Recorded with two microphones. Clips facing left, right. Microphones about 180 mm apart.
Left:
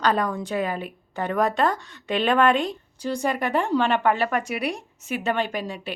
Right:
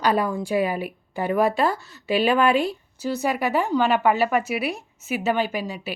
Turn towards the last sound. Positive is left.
turn(degrees=-5)  # may be behind; listen again after turning